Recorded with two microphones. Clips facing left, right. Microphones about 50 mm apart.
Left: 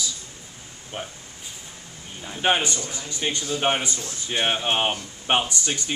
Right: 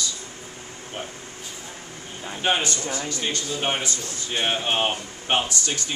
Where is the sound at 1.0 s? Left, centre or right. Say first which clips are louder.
Even; centre.